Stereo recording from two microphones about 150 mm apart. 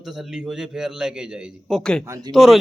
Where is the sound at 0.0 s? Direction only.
Centre (ahead or behind).